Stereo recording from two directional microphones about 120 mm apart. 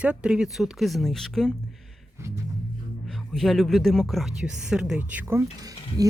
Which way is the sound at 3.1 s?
Centre (ahead or behind).